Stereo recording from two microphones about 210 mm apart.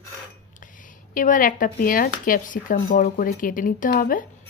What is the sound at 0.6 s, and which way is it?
Speech, 40° left (ahead or behind).